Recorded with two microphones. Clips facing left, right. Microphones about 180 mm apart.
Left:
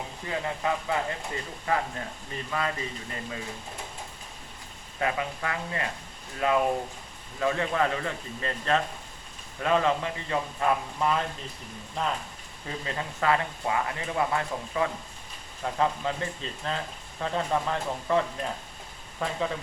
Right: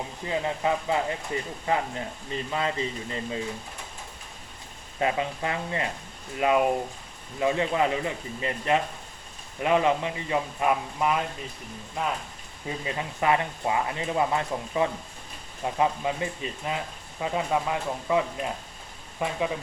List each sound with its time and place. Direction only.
0.3 s speech: 20° right (ahead or behind)
4.9 s speech: 20° right (ahead or behind)